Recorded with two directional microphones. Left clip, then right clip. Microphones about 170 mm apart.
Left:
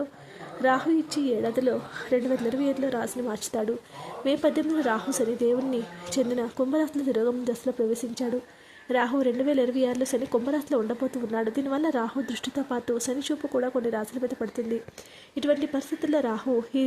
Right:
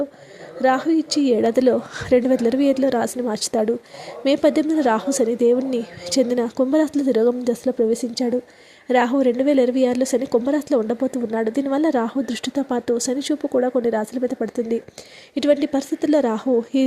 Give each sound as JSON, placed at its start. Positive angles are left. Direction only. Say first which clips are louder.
{"t": 0.6, "sound": "a woman's voice", "louder": "right 5 dB", "side_deg": -30}